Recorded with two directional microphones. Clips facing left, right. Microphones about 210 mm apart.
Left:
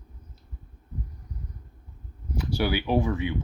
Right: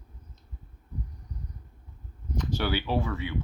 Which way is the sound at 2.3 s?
10° left (ahead or behind).